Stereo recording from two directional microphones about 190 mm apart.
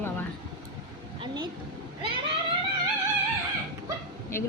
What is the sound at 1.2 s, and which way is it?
Vehicle, 20° right (ahead or behind).